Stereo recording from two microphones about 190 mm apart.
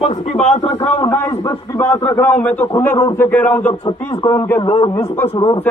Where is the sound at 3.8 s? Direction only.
20° left (ahead or behind).